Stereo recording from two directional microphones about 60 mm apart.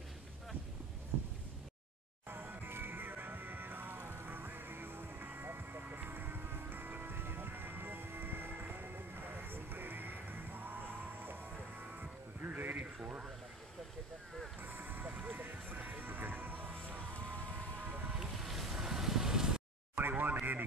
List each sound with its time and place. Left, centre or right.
2.2 s music: right
12.0 s music: right
14.6 s music: right
18.1 s boat: centre
20.0 s a sound: right